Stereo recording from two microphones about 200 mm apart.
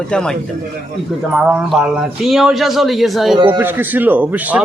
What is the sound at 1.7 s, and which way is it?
A man's voice, centre (ahead or behind).